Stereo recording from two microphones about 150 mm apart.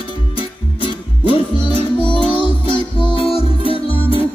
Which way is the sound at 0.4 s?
40° left (ahead or behind).